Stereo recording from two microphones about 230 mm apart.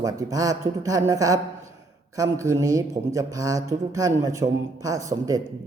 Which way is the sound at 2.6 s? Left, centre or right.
Centre.